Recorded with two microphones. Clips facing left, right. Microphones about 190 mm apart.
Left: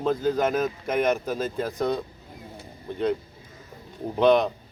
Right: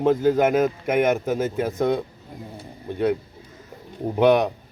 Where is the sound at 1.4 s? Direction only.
20° right (ahead or behind).